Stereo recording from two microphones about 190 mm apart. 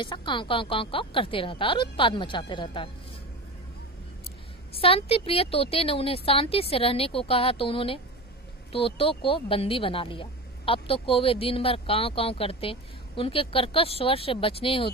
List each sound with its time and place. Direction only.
0.0 s speech: 25° left (ahead or behind)
4.7 s speech: 30° left (ahead or behind)